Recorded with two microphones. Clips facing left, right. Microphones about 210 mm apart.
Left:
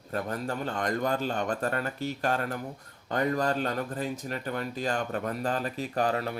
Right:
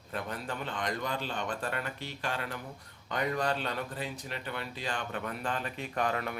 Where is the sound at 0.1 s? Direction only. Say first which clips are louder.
Left 5 dB; 40° left (ahead or behind).